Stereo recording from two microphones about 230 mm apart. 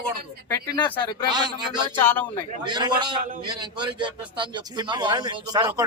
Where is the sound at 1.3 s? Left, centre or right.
Centre.